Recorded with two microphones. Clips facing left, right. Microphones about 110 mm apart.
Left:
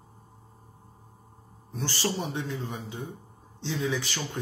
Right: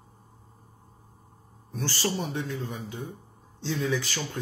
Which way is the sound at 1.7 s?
25° left (ahead or behind).